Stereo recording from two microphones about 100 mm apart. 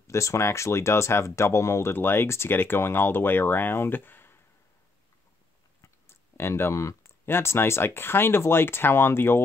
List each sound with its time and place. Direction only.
0.0 s speech: 30° left (ahead or behind)
5.8 s speech: 25° left (ahead or behind)